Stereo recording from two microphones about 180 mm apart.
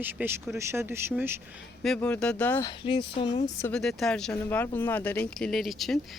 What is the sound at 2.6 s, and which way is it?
Speech, 25° left (ahead or behind).